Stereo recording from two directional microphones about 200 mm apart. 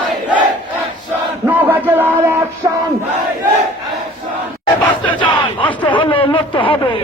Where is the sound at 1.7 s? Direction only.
10° right (ahead or behind).